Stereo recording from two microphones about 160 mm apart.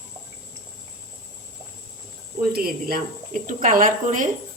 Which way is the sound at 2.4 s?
70° right (ahead or behind).